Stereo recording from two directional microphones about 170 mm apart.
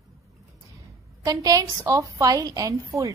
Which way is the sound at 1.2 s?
20° right (ahead or behind).